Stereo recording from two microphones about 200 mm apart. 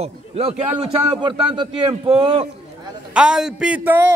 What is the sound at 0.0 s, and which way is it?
A man's voice, 30° right (ahead or behind).